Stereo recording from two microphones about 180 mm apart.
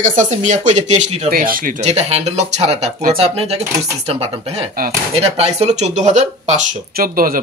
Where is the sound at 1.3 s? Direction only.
50° right (ahead or behind).